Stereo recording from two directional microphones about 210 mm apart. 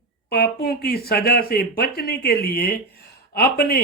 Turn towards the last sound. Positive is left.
turn(degrees=45)  # may be behind; listen again after turning